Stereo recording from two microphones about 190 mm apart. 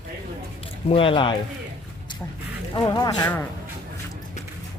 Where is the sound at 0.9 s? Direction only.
30° left (ahead or behind).